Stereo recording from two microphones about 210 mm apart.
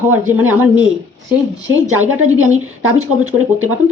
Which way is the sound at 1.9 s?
80° right.